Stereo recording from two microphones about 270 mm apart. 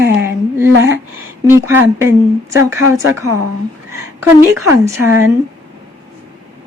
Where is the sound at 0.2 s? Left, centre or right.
Centre.